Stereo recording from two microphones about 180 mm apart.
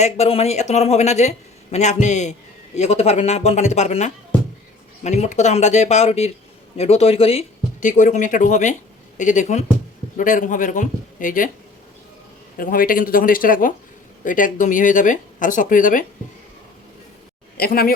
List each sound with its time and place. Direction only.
0.0 s a man's voice: 35° left (ahead or behind)
12.5 s speech: 50° left (ahead or behind)
17.6 s a man's voice: 55° left (ahead or behind)